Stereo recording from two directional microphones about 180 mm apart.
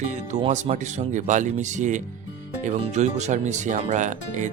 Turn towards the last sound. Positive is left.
turn(degrees=-45)  # may be behind; listen again after turning